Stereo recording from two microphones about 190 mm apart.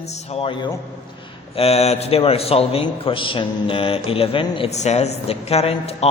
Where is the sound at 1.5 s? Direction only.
35° left (ahead or behind).